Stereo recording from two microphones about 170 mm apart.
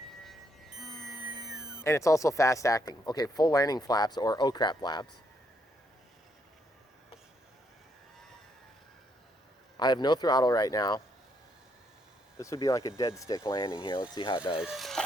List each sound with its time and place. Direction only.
0.8 s music: centre (ahead or behind)
1.8 s speech: 15° left (ahead or behind)
9.7 s speech: 25° left (ahead or behind)
12.4 s speech: 20° left (ahead or behind)
14.6 s speech: centre (ahead or behind)